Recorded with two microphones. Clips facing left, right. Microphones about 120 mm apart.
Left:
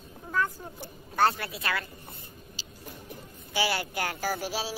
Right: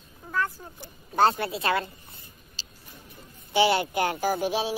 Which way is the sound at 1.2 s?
25° right (ahead or behind).